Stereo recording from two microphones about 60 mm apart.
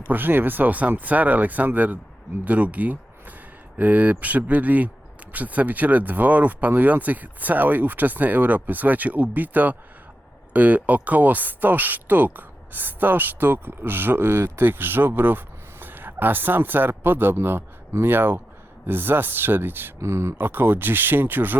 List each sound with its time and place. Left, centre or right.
0.1 s speech: right
14.6 s speech: right
20.0 s speech: right
20.4 s speech: right